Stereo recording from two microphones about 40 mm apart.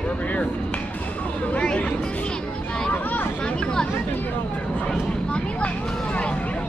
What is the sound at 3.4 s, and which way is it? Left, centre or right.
Speech, left.